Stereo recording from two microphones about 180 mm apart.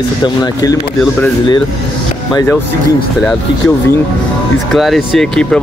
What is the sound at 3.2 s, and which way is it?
Speech, 5° left (ahead or behind).